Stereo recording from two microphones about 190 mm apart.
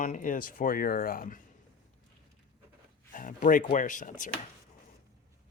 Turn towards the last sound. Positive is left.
turn(degrees=40)  # may be behind; listen again after turning